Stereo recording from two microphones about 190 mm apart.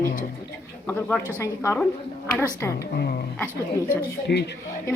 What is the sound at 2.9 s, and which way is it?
Speech, 55° left (ahead or behind).